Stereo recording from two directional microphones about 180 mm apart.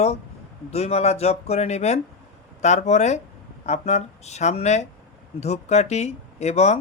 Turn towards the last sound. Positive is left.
turn(degrees=40)  # may be behind; listen again after turning